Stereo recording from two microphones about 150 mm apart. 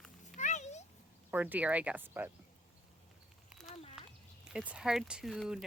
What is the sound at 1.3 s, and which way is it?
Speech, 10° right (ahead or behind).